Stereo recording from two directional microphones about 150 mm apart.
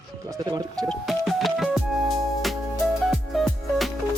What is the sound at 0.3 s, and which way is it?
Speech, 25° right (ahead or behind).